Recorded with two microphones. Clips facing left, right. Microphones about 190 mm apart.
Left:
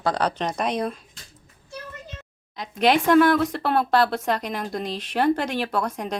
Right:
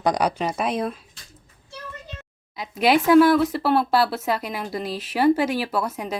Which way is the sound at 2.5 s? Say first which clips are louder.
Right 1 dB; 5° right (ahead or behind).